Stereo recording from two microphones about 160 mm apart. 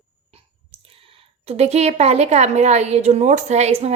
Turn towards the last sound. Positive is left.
turn(degrees=-45)  # may be behind; listen again after turning